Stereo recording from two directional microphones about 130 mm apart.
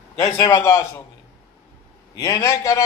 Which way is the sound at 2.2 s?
25° left (ahead or behind).